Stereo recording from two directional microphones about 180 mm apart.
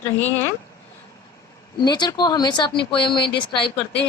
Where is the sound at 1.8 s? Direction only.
25° left (ahead or behind).